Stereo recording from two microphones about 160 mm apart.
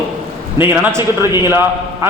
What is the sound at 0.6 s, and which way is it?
A man's voice, 15° right (ahead or behind).